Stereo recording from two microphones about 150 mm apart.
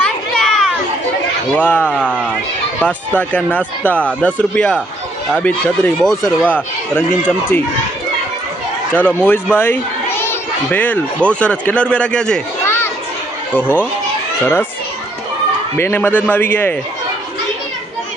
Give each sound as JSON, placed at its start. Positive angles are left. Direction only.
{"t": 0.0, "sound": "a sound", "side_deg": 5}
{"t": 1.5, "sound": "speech", "side_deg": 10}
{"t": 7.2, "sound": "speech", "side_deg": -10}
{"t": 8.9, "sound": "a child's voice", "side_deg": 15}
{"t": 12.6, "sound": "a sound", "side_deg": 15}
{"t": 13.5, "sound": "speech", "side_deg": 10}
{"t": 15.8, "sound": "speech", "side_deg": 15}